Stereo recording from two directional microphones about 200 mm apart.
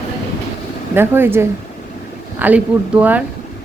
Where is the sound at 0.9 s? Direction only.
10° right (ahead or behind).